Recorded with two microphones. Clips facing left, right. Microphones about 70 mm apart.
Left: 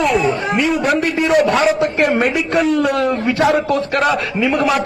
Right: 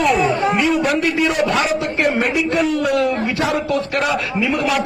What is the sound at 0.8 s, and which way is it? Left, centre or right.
Speech, left.